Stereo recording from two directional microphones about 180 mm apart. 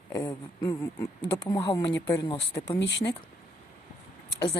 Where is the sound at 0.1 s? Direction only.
20° left (ahead or behind).